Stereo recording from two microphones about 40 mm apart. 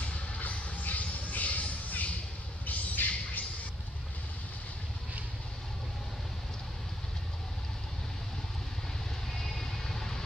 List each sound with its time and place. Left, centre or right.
0.0 s music: left
2.6 s squawk: left
9.3 s vehicle: centre